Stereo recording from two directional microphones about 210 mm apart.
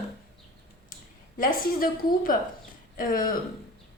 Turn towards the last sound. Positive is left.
turn(degrees=40)  # may be behind; listen again after turning